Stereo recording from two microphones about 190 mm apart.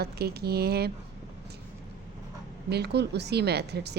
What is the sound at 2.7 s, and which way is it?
A woman's voice, 60° right (ahead or behind).